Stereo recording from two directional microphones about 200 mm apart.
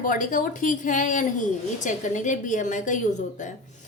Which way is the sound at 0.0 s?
40° left (ahead or behind).